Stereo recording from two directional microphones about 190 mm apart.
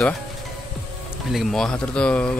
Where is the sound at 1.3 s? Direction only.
Centre (ahead or behind).